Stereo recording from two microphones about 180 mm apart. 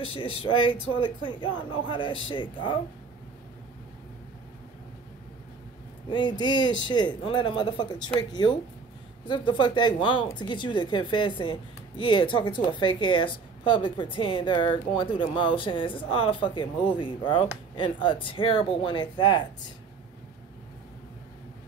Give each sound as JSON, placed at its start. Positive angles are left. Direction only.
{"t": 0.0, "sound": "speech", "side_deg": 30}
{"t": 6.0, "sound": "speech", "side_deg": 25}
{"t": 6.5, "sound": "speech", "side_deg": 90}
{"t": 6.9, "sound": "speech", "side_deg": 25}